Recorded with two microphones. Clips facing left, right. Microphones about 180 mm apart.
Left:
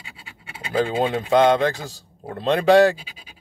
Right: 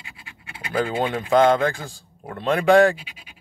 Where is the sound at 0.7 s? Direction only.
30° left (ahead or behind).